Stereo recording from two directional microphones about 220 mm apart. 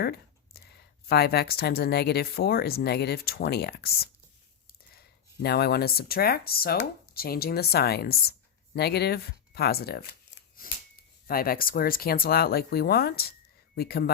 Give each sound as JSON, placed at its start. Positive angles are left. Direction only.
{"t": 0.0, "sound": "speech", "side_deg": 45}
{"t": 10.6, "sound": "a sound", "side_deg": 40}
{"t": 11.3, "sound": "speech", "side_deg": 40}